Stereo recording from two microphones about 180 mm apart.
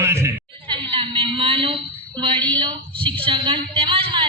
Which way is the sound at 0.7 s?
30° right (ahead or behind).